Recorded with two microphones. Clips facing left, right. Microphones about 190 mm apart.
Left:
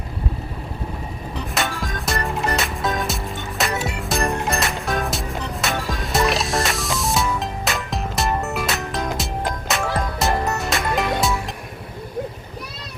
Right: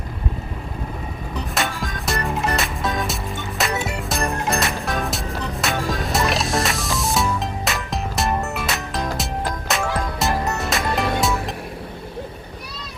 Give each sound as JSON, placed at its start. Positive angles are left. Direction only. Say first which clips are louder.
{"t": 1.5, "sound": "music", "louder": "left 1 dB", "side_deg": 0}